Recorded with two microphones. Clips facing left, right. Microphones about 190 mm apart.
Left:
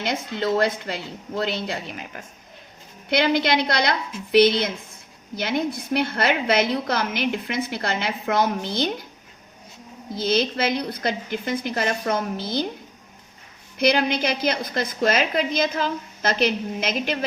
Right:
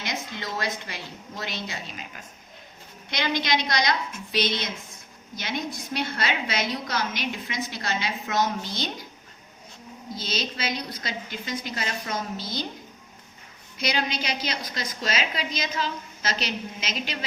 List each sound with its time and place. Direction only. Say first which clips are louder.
0.0 s a woman's voice: left 8 dB; 60° left (ahead or behind)
10.2 s a woman's voice: left 10 dB; 55° left (ahead or behind)
13.7 s a woman's voice: left 8 dB; 55° left (ahead or behind)